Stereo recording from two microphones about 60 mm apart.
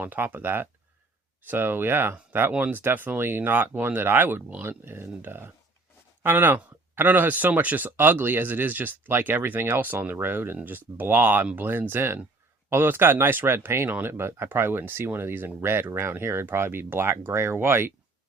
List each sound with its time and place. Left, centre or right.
0.0 s speech: right